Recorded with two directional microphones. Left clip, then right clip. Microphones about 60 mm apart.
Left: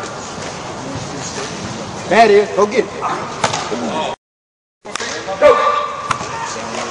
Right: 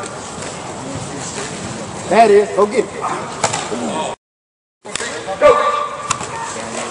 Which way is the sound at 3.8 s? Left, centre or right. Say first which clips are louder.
Left 1 dB; centre.